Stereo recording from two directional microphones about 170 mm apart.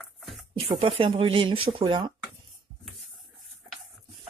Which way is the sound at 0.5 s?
35° right (ahead or behind).